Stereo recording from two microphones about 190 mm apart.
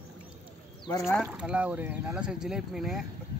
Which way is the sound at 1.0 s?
Centre (ahead or behind).